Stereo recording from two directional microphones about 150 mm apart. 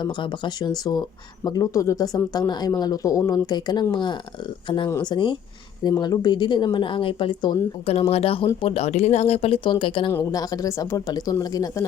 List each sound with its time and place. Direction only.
0.0 s speech: 30° left (ahead or behind)
10.1 s speech: 20° left (ahead or behind)